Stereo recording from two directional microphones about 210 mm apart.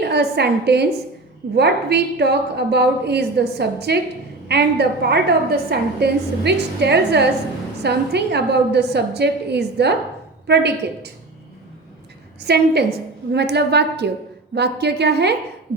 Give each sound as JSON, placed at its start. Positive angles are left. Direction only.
{"t": 0.0, "sound": "a woman's voice", "side_deg": -50}
{"t": 12.4, "sound": "a woman's voice", "side_deg": -50}